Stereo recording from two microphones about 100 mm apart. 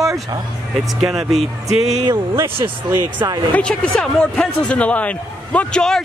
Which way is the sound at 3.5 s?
5° left (ahead or behind).